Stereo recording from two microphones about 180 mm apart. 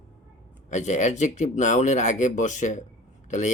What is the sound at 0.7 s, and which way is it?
Speech, 40° left (ahead or behind).